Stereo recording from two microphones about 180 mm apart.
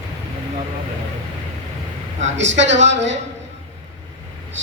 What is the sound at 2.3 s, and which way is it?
Speech, 80° right.